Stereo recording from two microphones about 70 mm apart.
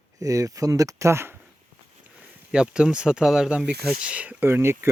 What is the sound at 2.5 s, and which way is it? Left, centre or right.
Speech, centre.